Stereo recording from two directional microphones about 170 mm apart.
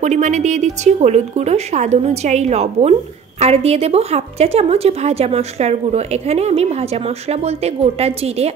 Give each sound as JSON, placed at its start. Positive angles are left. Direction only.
{"t": 0.0, "sound": "speech", "side_deg": -45}